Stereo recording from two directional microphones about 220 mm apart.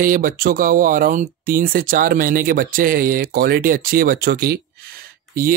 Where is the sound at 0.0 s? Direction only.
40° right (ahead or behind).